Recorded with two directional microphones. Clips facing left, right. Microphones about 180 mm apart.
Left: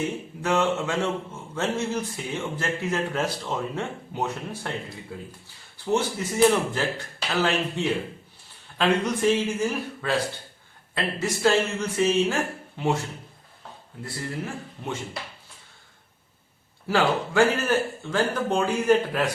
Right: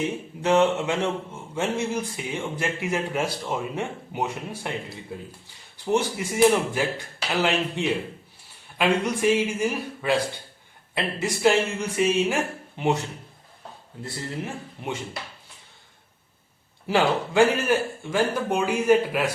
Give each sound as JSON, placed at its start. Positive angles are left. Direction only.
{"t": 0.0, "sound": "a man's voice", "side_deg": -20}
{"t": 5.7, "sound": "a man's voice", "side_deg": -15}
{"t": 14.0, "sound": "speech", "side_deg": -20}
{"t": 16.8, "sound": "a man's voice", "side_deg": -15}